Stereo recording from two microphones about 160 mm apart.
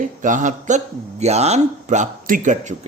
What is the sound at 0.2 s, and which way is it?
A man's voice, 50° right (ahead or behind).